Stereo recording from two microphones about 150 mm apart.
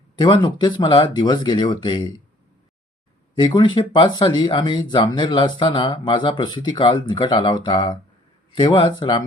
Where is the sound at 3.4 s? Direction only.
30° left (ahead or behind).